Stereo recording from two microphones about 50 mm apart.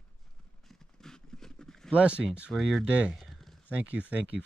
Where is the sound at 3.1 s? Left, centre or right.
Centre.